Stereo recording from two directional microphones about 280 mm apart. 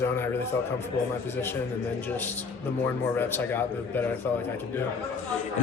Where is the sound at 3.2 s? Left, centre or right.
Centre.